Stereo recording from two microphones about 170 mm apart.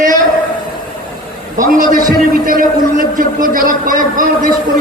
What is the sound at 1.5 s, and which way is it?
A man's voice, 50° right (ahead or behind).